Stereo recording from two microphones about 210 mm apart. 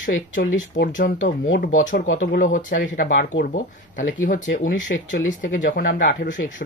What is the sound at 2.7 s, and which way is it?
Speech, 50° left (ahead or behind).